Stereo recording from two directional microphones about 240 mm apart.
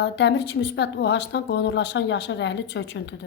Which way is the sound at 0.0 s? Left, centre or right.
Left.